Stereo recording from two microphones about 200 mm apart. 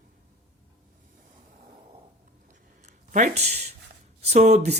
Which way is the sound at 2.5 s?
40° right (ahead or behind).